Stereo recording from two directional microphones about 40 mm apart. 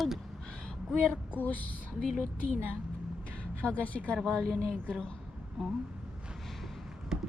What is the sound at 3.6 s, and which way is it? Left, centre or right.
Speech, left.